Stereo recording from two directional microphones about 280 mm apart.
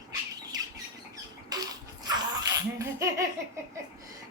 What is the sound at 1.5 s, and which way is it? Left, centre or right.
Laughter, centre.